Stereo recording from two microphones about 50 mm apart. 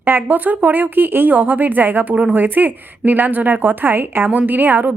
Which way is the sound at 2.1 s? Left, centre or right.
Right.